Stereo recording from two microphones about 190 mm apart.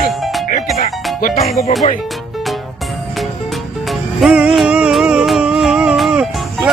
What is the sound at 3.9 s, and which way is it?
Music, centre (ahead or behind).